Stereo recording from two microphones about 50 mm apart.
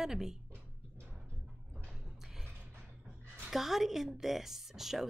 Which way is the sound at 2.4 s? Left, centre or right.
Right.